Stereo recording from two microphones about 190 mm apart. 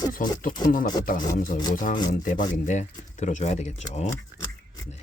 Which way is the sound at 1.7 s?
45° left (ahead or behind).